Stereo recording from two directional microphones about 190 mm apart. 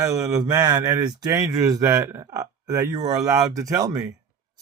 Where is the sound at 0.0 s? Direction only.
20° right (ahead or behind).